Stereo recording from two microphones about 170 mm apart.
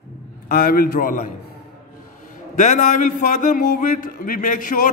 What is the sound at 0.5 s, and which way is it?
Speech, 60° left (ahead or behind).